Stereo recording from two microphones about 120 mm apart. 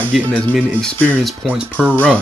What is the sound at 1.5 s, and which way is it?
Speech, 15° right (ahead or behind).